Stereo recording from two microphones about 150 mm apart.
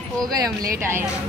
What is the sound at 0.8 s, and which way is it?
Speech, 15° right (ahead or behind).